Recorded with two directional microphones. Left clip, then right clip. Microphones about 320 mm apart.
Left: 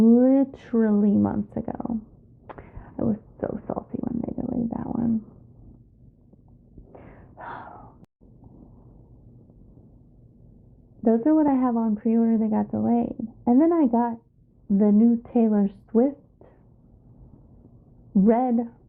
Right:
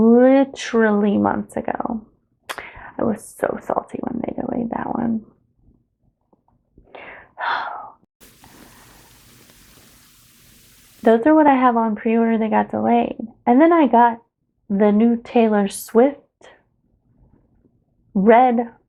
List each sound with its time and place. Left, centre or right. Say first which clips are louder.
0.0 s speech: right 6 dB; centre
6.9 s gasp: right 11 dB; centre
8.5 s a sound: right 8 dB; centre
11.0 s speech: right 8 dB; centre
18.1 s speech: right 9 dB; centre